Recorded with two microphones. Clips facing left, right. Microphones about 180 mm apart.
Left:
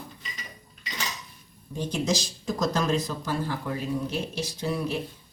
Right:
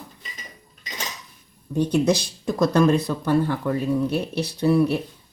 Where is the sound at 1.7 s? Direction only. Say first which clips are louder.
Right 8 dB; 60° right (ahead or behind).